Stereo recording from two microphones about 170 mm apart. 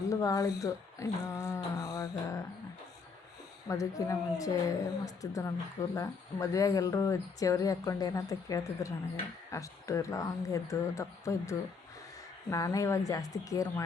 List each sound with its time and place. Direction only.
0.1 s speech: 20° left (ahead or behind)
3.7 s speech: 20° left (ahead or behind)